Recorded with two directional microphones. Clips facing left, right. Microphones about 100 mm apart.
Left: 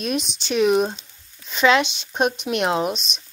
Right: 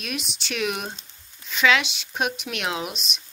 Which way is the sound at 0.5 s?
30° left (ahead or behind).